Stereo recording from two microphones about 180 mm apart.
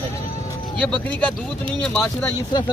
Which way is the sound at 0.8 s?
5° left (ahead or behind).